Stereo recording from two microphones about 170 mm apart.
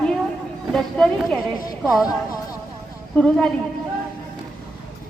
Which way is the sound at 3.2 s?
5° left (ahead or behind).